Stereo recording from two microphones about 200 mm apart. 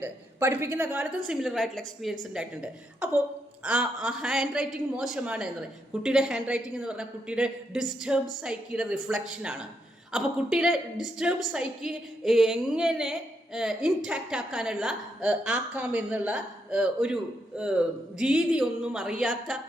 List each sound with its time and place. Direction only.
0.0 s a woman's voice: 10° right (ahead or behind)